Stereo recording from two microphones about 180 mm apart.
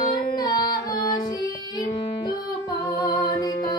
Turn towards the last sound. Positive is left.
turn(degrees=20)  # may be behind; listen again after turning